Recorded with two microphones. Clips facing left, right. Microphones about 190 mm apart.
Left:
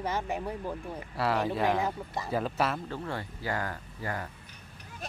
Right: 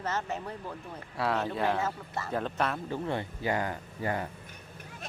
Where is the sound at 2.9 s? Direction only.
20° right (ahead or behind).